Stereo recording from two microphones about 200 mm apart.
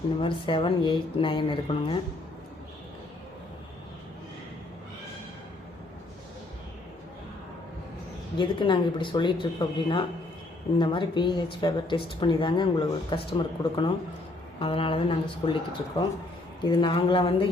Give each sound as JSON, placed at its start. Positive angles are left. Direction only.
{"t": 0.2, "sound": "a woman's voice", "side_deg": 25}
{"t": 8.4, "sound": "a woman's voice", "side_deg": 25}